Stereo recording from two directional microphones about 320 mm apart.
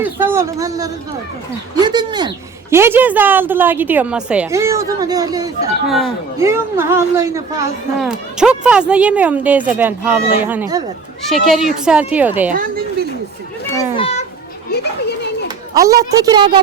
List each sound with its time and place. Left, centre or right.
0.0 s a woman's voice: centre
5.9 s speech: centre
12.5 s a sound: right
13.9 s children playing: centre
15.7 s a woman's voice: centre